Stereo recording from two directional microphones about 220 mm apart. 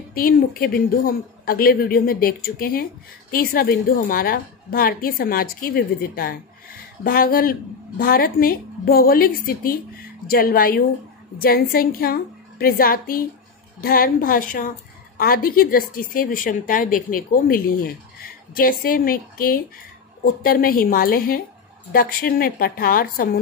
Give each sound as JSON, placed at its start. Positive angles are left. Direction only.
{"t": 0.1, "sound": "a woman's voice", "side_deg": 40}